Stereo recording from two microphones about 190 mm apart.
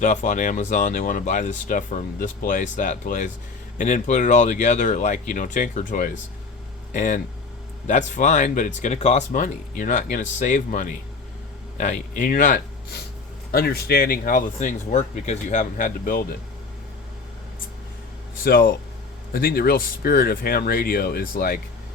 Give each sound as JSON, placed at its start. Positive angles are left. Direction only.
{"t": 0.0, "sound": "speech", "side_deg": 40}
{"t": 18.4, "sound": "speech", "side_deg": 50}